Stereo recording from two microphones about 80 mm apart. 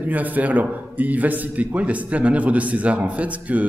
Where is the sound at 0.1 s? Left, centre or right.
Right.